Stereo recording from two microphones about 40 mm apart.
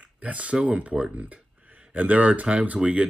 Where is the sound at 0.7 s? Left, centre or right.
Right.